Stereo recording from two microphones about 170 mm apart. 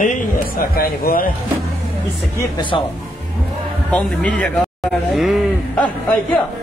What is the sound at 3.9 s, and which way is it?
A man's voice, 5° left (ahead or behind).